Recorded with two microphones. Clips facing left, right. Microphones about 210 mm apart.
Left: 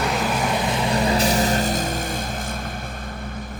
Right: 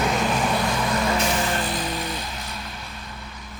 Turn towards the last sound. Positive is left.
turn(degrees=50)  # may be behind; listen again after turning